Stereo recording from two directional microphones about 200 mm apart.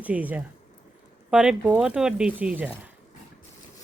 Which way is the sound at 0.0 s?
5° right (ahead or behind).